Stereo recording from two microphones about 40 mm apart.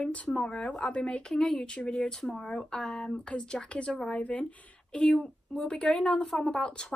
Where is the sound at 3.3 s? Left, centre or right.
Left.